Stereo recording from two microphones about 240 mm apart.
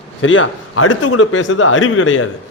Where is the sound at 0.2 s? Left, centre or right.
Left.